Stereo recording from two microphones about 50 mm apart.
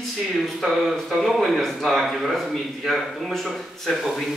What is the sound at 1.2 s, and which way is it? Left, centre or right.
A man's voice, centre.